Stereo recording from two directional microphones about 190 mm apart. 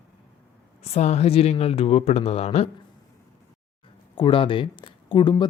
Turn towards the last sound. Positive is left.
turn(degrees=25)  # may be behind; listen again after turning